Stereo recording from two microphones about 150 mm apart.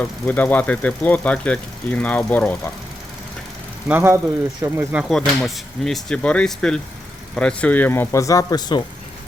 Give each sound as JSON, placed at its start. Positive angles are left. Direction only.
{"t": 0.0, "sound": "speech", "side_deg": 10}
{"t": 3.8, "sound": "speech", "side_deg": -15}
{"t": 5.4, "sound": "speech", "side_deg": 0}